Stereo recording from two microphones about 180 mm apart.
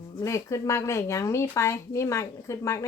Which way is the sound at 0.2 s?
15° left (ahead or behind).